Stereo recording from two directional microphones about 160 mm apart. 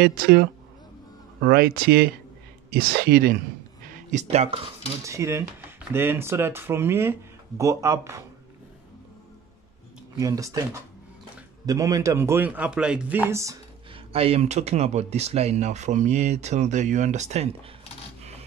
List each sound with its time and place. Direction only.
0.0 s speech: 70° right (ahead or behind)
4.1 s speech: 45° right (ahead or behind)
5.0 s speech: 20° right (ahead or behind)
10.1 s speech: 20° right (ahead or behind)
13.9 s speech: 35° right (ahead or behind)